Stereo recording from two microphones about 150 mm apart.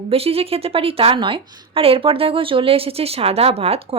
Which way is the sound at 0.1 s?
40° right (ahead or behind).